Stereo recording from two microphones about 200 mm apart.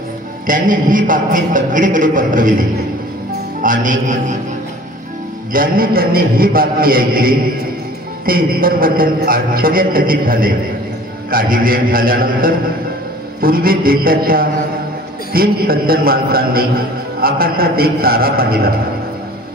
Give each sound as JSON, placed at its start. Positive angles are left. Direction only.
{"t": 0.5, "sound": "a man's voice", "side_deg": -40}
{"t": 3.6, "sound": "a man's voice", "side_deg": -40}
{"t": 5.5, "sound": "a man's voice", "side_deg": -45}